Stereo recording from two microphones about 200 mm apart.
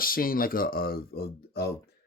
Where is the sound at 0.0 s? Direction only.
45° left (ahead or behind).